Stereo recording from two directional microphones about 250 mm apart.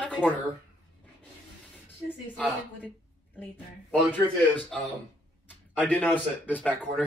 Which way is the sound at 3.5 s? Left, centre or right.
Centre.